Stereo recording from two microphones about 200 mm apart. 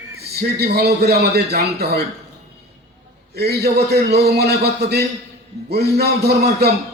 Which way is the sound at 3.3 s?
55° right (ahead or behind).